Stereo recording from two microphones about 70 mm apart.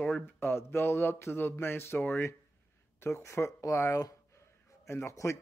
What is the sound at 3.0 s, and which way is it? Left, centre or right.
Speech, left.